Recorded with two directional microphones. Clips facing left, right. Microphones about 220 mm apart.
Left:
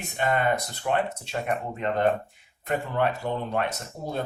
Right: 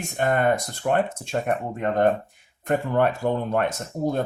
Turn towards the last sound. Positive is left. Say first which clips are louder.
# right 7 dB
turn(degrees=-50)  # may be behind; listen again after turning